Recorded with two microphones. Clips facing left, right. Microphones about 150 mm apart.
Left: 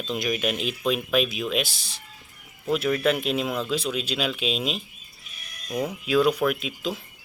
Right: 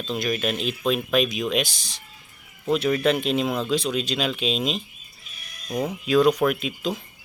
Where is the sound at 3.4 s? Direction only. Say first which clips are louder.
Right 2 dB; 30° right (ahead or behind).